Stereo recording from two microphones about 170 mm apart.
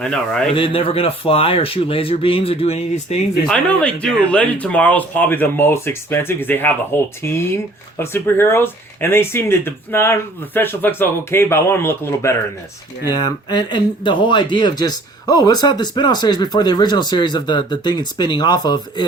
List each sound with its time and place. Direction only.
0.0 s speech: 5° left (ahead or behind)
0.5 s speech: 30° left (ahead or behind)
3.4 s speech: 5° left (ahead or behind); by 19.0 s 25° left (ahead or behind)